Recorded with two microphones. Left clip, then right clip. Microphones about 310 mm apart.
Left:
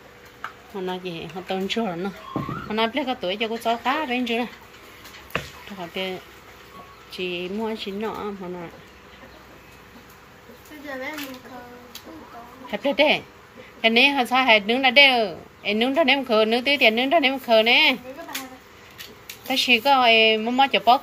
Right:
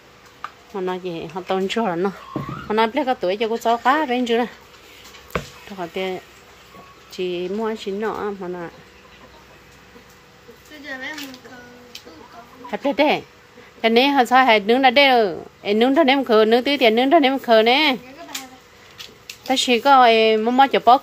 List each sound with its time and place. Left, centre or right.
0.7 s a woman's voice: centre
5.8 s a woman's voice: centre
12.7 s a woman's voice: centre
19.5 s a woman's voice: right